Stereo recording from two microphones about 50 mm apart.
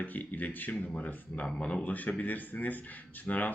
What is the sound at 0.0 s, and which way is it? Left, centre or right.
Speech, left.